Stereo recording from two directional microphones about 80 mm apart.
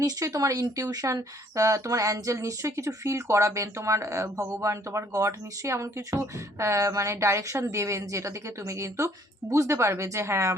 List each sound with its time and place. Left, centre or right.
0.0 s speech: right